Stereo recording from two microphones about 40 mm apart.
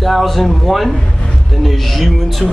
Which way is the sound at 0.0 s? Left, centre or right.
Centre.